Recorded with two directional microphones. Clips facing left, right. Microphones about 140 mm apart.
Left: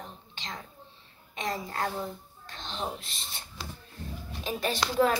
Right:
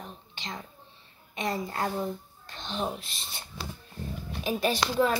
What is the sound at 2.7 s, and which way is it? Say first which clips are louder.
A woman's voice: right 4 dB; centre (ahead or behind).